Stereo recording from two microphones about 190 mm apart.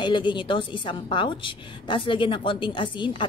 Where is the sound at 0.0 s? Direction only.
25° left (ahead or behind).